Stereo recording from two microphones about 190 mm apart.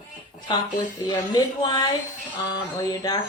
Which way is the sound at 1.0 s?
20° left (ahead or behind).